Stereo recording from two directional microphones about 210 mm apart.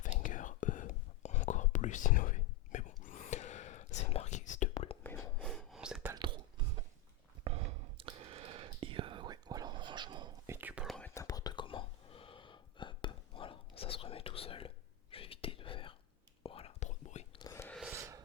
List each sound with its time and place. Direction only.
0.0 s whispering: 40° left (ahead or behind)
5.0 s whispering: 10° left (ahead or behind)
5.5 s whispering: centre (ahead or behind)
6.1 s whispering: 20° right (ahead or behind)
7.4 s whispering: 30° right (ahead or behind); by 11.1 s centre (ahead or behind)
11.1 s whispering: 15° left (ahead or behind); by 17.2 s 35° left (ahead or behind)
17.3 s whispering: 15° left (ahead or behind)
17.9 s rub: 15° right (ahead or behind)